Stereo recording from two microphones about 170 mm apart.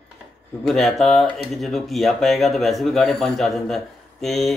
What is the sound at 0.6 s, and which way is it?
Speech, centre (ahead or behind).